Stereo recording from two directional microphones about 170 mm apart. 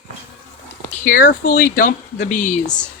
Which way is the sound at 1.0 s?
55° left (ahead or behind).